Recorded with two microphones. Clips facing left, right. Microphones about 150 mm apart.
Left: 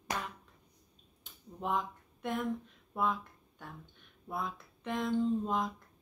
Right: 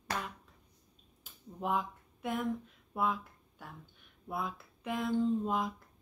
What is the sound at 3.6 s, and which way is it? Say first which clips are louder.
Speech: left 1 dB; 5° right (ahead or behind).